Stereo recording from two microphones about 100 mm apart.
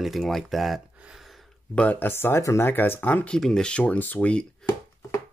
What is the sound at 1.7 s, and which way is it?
Speech, 15° left (ahead or behind).